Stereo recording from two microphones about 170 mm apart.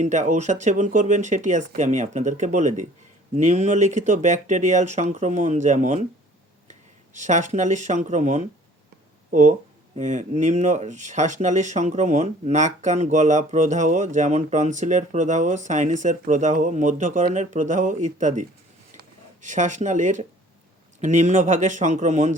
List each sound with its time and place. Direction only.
0.0 s speech: 45° right (ahead or behind)